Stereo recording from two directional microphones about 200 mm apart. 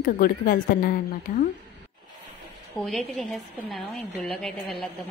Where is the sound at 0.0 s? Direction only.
50° left (ahead or behind).